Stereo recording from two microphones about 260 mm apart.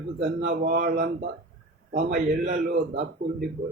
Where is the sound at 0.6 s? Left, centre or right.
Right.